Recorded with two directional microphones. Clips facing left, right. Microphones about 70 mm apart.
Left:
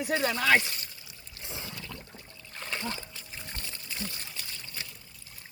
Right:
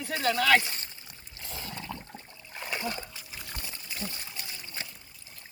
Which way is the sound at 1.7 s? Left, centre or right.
Right.